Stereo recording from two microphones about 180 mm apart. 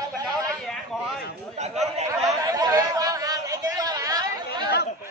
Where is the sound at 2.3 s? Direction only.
20° right (ahead or behind).